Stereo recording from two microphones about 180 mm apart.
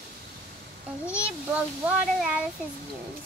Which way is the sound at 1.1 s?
5° right (ahead or behind).